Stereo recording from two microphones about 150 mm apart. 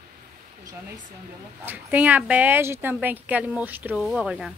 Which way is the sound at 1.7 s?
10° right (ahead or behind).